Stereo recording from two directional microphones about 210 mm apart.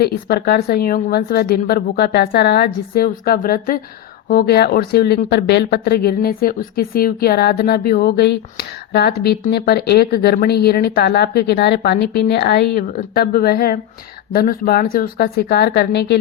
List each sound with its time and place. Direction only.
0.0 s speech: 50° left (ahead or behind)